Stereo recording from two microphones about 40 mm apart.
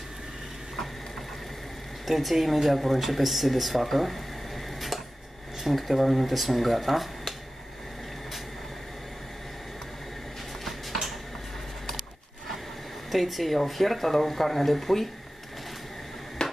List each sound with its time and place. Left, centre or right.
2.0 s speech: centre
5.6 s speech: centre
10.6 s a sound: centre
13.1 s speech: centre
16.4 s finger snapping: centre